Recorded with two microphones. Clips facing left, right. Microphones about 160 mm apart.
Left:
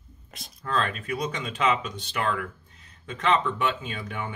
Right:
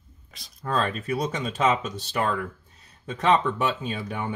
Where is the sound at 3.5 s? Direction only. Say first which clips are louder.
Right 2 dB; 40° right (ahead or behind).